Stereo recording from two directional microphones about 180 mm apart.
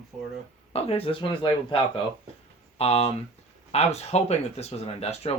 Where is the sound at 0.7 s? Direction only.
35° left (ahead or behind).